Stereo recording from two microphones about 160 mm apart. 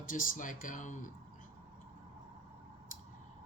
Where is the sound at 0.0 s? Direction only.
55° left (ahead or behind).